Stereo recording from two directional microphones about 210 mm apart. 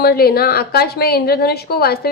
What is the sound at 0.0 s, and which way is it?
A woman's voice, 50° left (ahead or behind).